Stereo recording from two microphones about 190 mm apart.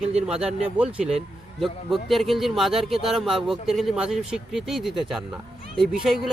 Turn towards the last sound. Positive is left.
turn(degrees=0)  # may be behind; listen again after turning